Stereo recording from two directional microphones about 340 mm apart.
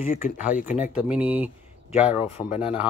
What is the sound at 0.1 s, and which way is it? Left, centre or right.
Speech, left.